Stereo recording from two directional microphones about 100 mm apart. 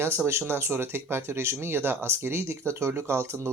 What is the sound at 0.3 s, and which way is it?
Speech, 25° right (ahead or behind).